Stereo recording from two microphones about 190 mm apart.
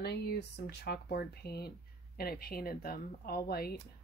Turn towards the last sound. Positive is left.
turn(degrees=55)  # may be behind; listen again after turning